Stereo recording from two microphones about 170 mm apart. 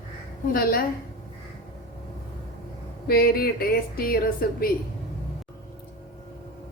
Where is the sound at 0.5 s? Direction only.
60° left (ahead or behind).